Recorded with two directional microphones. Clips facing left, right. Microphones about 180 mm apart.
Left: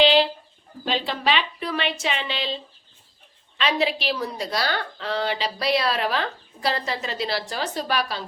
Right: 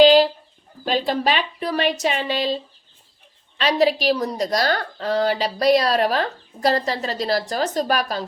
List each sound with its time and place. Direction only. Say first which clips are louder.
0.0 s chicken: right 6 dB; 40° right (ahead or behind)
0.9 s speech: right 4 dB; 45° right (ahead or behind)
3.6 s a woman's voice: right 5 dB; 40° right (ahead or behind)